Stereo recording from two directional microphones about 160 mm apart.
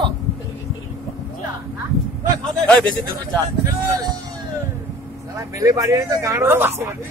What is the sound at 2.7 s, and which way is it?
Speech, 5° left (ahead or behind).